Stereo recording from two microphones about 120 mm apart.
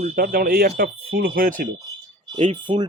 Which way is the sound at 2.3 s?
60° right (ahead or behind).